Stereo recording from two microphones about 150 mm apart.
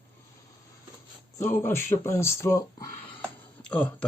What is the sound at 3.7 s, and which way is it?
Speech, 10° left (ahead or behind).